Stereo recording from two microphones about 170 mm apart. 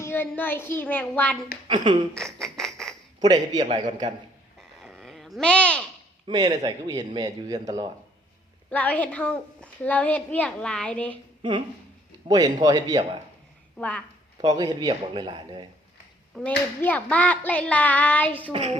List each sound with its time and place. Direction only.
0.0 s a woman's voice: 10° left (ahead or behind)
1.6 s a man's voice: 30° right (ahead or behind)
2.1 s a sound: centre (ahead or behind)
3.2 s a man's voice: 25° right (ahead or behind)
3.8 s a man's voice: 45° right (ahead or behind)
4.8 s a sound: centre (ahead or behind)
6.2 s a man's voice: 25° right (ahead or behind)
8.7 s a woman's voice: 10° left (ahead or behind)
12.3 s a man's voice: 25° right (ahead or behind)
13.7 s a woman's voice: 10° left (ahead or behind)
14.4 s a man's voice: 20° right (ahead or behind)
16.3 s a woman's voice: 10° left (ahead or behind)
18.5 s a woman's voice: 35° right (ahead or behind)